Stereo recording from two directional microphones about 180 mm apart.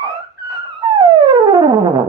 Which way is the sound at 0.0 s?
25° right (ahead or behind).